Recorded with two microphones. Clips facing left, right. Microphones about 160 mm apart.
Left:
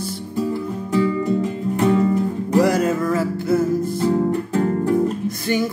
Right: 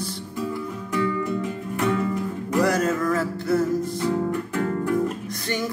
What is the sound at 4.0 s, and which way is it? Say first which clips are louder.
Music: left 5 dB; 30° left (ahead or behind).